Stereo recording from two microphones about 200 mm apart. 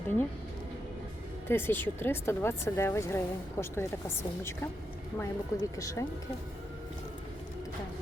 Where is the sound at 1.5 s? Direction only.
10° left (ahead or behind).